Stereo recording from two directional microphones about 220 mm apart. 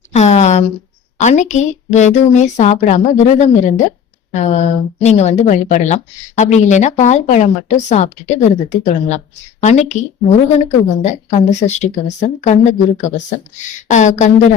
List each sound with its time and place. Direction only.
0.1 s a sound: 30° left (ahead or behind)
1.2 s speech: 35° left (ahead or behind)
11.0 s speech: 30° left (ahead or behind)